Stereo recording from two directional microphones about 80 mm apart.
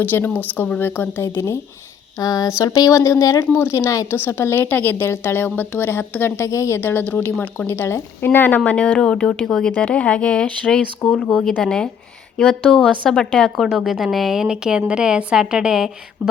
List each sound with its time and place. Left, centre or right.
0.0 s a woman's voice: left
2.1 s a woman's voice: left; by 9.7 s centre
9.7 s speech: centre